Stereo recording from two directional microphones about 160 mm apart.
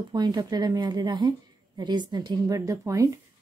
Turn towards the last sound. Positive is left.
turn(degrees=-20)  # may be behind; listen again after turning